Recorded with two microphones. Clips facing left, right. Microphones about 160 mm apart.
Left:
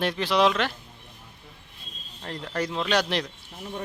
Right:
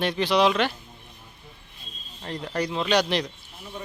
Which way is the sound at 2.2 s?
5° right (ahead or behind).